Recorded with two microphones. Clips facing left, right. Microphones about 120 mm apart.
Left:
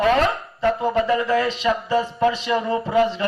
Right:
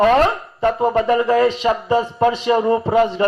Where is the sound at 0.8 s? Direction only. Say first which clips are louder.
Right 4 dB; 50° right (ahead or behind).